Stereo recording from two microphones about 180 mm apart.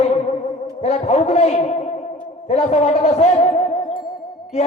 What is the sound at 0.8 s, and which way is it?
Speech, 35° left (ahead or behind).